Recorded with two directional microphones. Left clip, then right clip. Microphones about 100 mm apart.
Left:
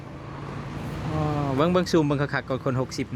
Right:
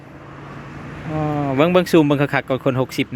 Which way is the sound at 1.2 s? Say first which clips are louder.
Right 7 dB; 25° right (ahead or behind).